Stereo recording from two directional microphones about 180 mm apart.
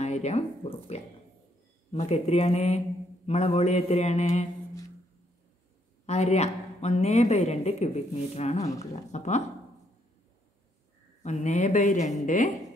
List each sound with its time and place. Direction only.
0.0 s a woman's voice: 40° left (ahead or behind)
6.0 s a woman's voice: 35° left (ahead or behind)
11.2 s speech: 40° left (ahead or behind)